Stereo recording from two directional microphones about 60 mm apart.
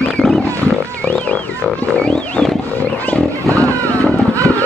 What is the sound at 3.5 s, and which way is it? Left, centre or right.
Vehicle, right.